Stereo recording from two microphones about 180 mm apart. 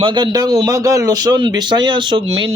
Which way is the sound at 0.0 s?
25° right (ahead or behind).